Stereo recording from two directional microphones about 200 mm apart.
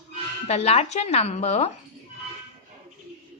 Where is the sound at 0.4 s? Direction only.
30° left (ahead or behind).